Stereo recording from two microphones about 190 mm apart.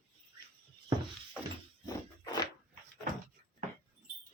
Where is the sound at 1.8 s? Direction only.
20° left (ahead or behind).